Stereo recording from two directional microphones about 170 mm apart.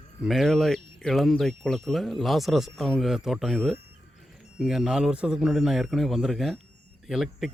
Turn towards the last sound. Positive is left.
turn(degrees=0)  # may be behind; listen again after turning